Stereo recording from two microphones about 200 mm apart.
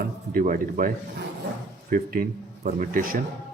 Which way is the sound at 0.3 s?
45° right (ahead or behind).